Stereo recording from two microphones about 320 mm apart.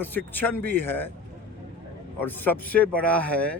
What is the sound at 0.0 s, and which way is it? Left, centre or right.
Speech, centre.